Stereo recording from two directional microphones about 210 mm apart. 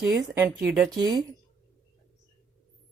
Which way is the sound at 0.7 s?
Centre (ahead or behind).